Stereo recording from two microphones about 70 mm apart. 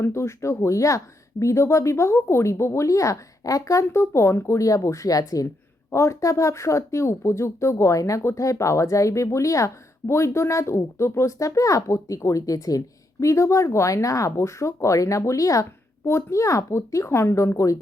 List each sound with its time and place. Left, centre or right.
0.0 s speech: left
13.1 s speech: left